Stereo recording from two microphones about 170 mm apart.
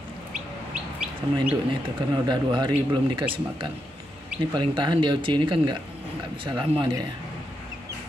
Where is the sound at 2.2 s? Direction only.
25° right (ahead or behind).